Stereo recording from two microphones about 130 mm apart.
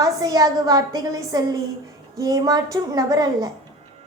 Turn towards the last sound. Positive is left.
turn(degrees=-30)  # may be behind; listen again after turning